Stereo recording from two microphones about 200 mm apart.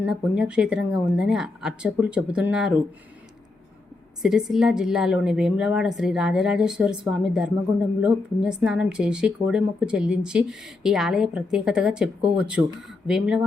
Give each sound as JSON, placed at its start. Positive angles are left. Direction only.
{"t": 0.0, "sound": "a woman's voice", "side_deg": -5}
{"t": 4.2, "sound": "a woman's voice", "side_deg": 0}